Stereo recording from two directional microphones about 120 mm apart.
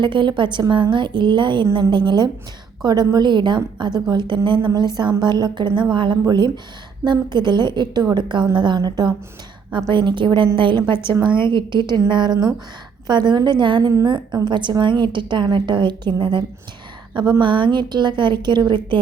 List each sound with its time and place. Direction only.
0.0 s a woman's voice: 40° right (ahead or behind)
17.4 s a woman's voice: 40° right (ahead or behind)